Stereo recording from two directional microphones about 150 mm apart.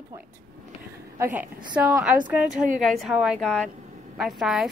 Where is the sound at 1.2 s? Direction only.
15° right (ahead or behind).